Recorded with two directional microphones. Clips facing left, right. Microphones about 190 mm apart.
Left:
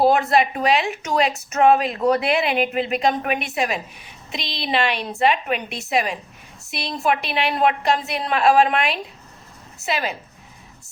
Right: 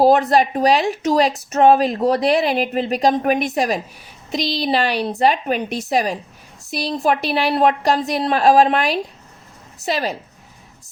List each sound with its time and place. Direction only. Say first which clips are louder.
0.0 s speech: right 3 dB; 35° right (ahead or behind)